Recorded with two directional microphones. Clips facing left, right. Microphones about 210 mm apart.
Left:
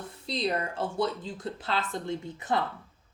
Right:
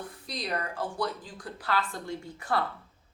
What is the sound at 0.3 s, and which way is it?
A woman's voice, 25° left (ahead or behind).